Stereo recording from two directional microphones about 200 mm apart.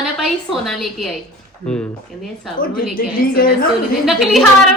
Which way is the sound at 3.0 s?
45° left (ahead or behind).